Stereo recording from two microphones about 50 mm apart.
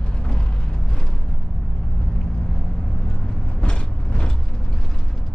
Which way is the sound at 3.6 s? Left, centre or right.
Centre.